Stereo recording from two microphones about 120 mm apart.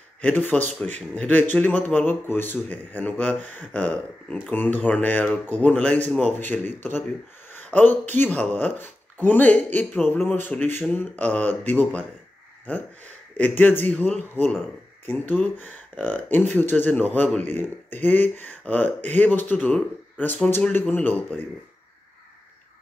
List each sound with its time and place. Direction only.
0.2 s speech: 15° left (ahead or behind)
7.5 s a sound: 15° left (ahead or behind)
8.1 s speech: 15° left (ahead or behind)
12.7 s speech: 15° left (ahead or behind)